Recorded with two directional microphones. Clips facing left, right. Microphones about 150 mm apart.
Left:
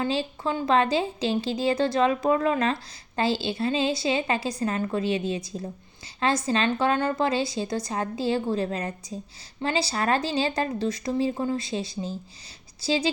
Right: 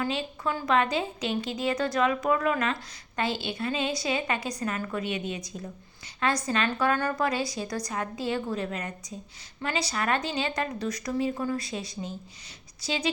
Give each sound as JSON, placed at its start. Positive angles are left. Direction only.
{"t": 0.0, "sound": "a woman's voice", "side_deg": 30}